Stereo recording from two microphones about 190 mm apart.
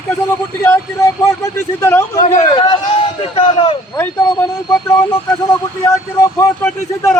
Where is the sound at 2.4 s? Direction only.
20° left (ahead or behind).